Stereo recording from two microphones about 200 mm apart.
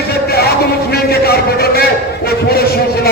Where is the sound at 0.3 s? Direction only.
50° left (ahead or behind).